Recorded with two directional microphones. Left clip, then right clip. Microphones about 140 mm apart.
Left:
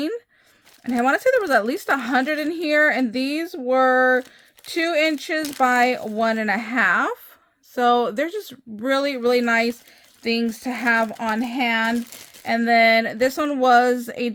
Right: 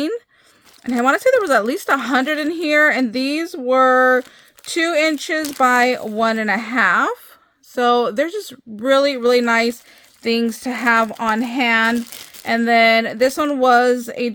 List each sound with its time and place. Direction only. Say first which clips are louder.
0.9 s a woman's voice: right 4 dB; 30° right (ahead or behind)
5.4 s speech: right 3 dB; 15° right (ahead or behind)
5.6 s a woman's voice: right 3 dB; 30° right (ahead or behind)